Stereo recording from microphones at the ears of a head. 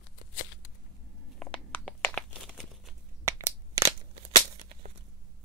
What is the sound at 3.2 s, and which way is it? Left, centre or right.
Crushing, right.